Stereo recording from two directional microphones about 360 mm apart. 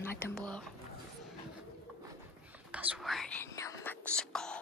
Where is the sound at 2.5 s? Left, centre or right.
Centre.